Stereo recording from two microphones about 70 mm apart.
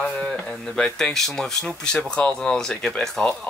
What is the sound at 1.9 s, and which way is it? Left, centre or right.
Speech, centre.